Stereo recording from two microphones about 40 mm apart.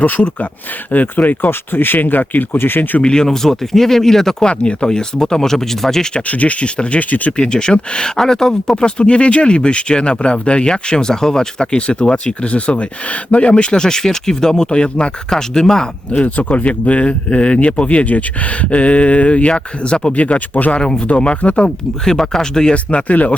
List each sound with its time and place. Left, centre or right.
0.0 s speech: left
3.0 s speech: left
3.2 s speech: centre
4.4 s speech: left
6.2 s speech: left
7.4 s speech: left
8.7 s speech: left
16.1 s speech: left
20.1 s speech: left
22.0 s speech: centre
22.7 s speech: left